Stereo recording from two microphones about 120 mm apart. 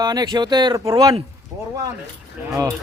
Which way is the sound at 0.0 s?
35° right (ahead or behind).